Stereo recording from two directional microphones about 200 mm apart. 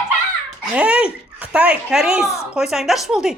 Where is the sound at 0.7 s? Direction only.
5° right (ahead or behind).